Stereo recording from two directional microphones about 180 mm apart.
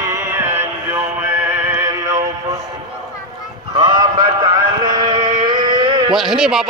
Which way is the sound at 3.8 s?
25° right (ahead or behind).